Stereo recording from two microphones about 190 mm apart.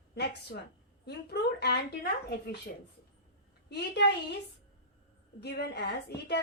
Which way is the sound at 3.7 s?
60° left (ahead or behind).